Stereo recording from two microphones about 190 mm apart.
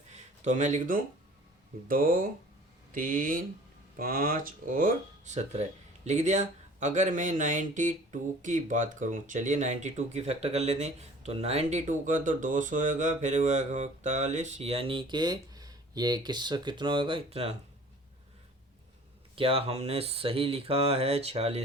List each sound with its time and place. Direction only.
0.1 s a sound: 40° right (ahead or behind)
1.9 s speech: 45° right (ahead or behind); by 17.5 s 30° right (ahead or behind)
19.4 s speech: 30° right (ahead or behind)